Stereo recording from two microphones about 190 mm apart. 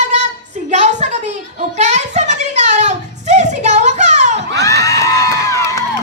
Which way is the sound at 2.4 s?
40° right (ahead or behind).